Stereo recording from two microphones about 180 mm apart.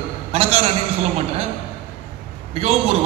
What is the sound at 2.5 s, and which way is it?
Speech, 35° right (ahead or behind).